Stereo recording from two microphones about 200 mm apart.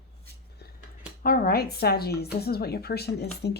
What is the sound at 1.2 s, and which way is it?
A woman's voice, 45° left (ahead or behind).